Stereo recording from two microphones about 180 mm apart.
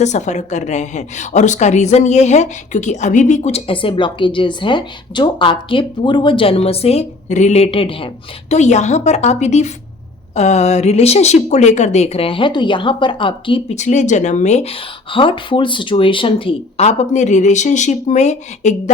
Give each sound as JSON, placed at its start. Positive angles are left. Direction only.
{"t": 0.0, "sound": "a woman's voice", "side_deg": 40}